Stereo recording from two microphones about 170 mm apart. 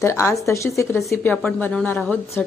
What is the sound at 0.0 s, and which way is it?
A woman's voice, 15° left (ahead or behind).